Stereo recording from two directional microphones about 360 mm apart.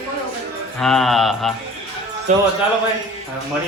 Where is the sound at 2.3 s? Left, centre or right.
Centre.